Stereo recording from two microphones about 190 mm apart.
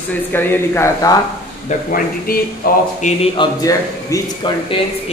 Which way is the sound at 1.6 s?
45° left (ahead or behind).